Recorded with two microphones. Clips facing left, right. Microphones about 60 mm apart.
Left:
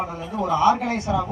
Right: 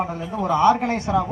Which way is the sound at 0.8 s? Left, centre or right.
Right.